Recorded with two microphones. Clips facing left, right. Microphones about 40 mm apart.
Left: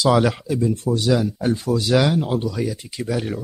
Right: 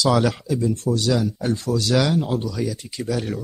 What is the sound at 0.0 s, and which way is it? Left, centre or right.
Speech, centre.